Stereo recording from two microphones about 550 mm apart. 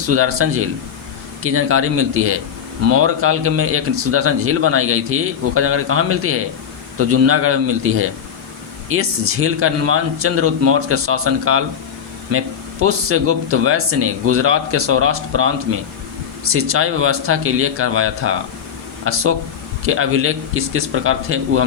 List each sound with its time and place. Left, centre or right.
0.1 s speech: right